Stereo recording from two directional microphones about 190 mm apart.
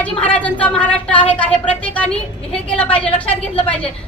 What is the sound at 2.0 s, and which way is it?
Speech, 30° left (ahead or behind).